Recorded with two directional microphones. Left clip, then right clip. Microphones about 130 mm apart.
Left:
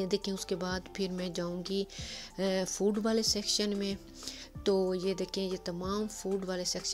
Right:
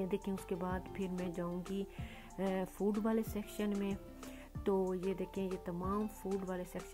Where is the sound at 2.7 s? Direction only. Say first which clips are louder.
Left 6 dB; 35° left (ahead or behind).